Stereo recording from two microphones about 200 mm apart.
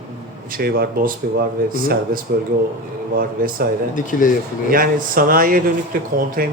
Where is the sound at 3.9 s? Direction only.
40° left (ahead or behind).